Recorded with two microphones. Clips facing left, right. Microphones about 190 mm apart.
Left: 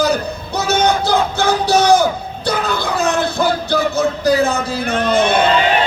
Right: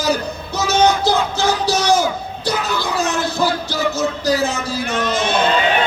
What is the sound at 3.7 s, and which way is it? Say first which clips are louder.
Music: left 4 dB; 60° left (ahead or behind).